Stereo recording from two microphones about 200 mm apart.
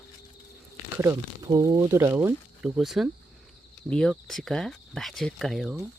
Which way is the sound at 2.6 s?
Centre (ahead or behind).